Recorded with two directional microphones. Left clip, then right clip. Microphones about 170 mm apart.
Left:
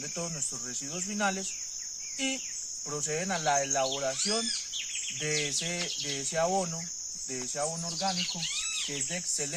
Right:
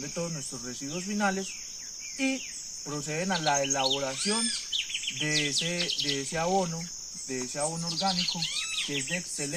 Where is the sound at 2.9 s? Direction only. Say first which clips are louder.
Right 1 dB; 35° left (ahead or behind).